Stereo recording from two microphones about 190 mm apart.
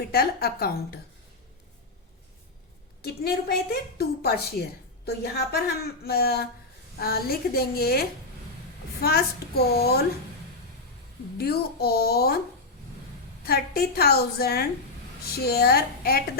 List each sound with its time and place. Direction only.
0.1 s a woman's voice: 55° left (ahead or behind)
3.0 s a woman's voice: 55° left (ahead or behind)
11.3 s a woman's voice: 55° left (ahead or behind)
13.4 s a woman's voice: 55° left (ahead or behind)